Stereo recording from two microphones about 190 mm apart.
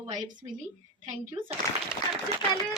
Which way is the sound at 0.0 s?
20° right (ahead or behind).